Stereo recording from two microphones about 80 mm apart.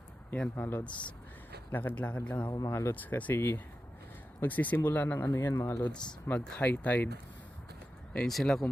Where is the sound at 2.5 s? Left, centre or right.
Left.